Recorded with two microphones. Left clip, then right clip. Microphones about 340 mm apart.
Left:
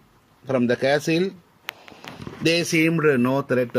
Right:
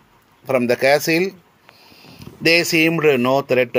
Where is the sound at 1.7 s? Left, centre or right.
Left.